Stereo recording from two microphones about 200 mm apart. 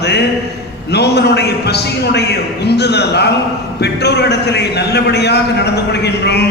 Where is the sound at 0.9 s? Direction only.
55° left (ahead or behind).